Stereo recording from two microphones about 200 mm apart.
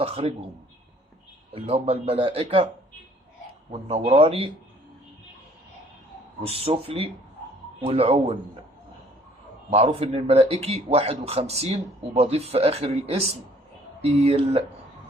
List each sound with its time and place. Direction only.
0.0 s speech: 30° right (ahead or behind)
1.5 s speech: 30° right (ahead or behind)
3.7 s speech: 30° right (ahead or behind)
6.4 s a man's voice: 30° right (ahead or behind)
9.6 s a man's voice: 30° right (ahead or behind)